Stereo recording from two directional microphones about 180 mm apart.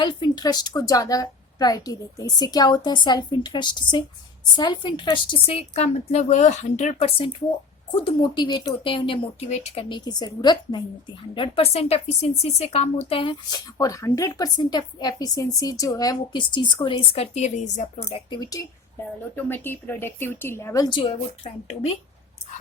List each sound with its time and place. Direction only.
0.0 s a woman's voice: 25° left (ahead or behind); by 18.2 s 40° left (ahead or behind)
18.3 s a woman's voice: 20° left (ahead or behind)
21.4 s a woman's voice: 35° left (ahead or behind)